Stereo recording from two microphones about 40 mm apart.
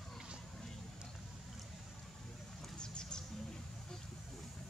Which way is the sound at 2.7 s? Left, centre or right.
Left.